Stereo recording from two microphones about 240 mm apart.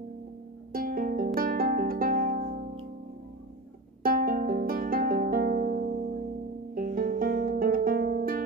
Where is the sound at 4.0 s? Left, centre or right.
Right.